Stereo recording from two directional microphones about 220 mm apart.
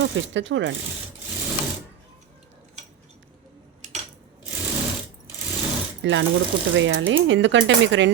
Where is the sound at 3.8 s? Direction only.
35° right (ahead or behind).